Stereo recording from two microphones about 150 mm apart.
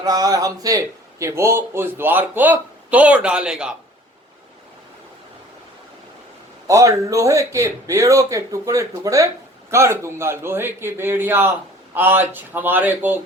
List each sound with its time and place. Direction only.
0.0 s speech: 25° right (ahead or behind); by 3.8 s 5° right (ahead or behind)
6.7 s a man's voice: 20° right (ahead or behind)